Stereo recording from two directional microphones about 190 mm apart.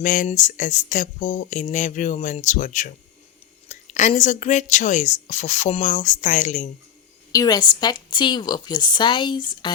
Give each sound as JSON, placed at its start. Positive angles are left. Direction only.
{"t": 0.0, "sound": "speech", "side_deg": 45}
{"t": 7.3, "sound": "speech", "side_deg": 20}